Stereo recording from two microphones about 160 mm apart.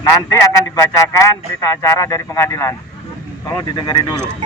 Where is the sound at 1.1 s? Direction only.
20° left (ahead or behind).